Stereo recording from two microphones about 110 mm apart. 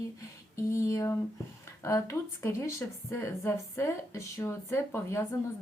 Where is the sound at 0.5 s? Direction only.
25° left (ahead or behind).